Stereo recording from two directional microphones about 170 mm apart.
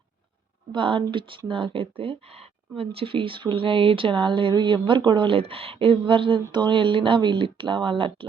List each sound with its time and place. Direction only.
0.7 s speech: 30° right (ahead or behind)